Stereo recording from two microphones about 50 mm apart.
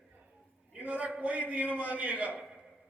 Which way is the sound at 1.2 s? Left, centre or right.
Right.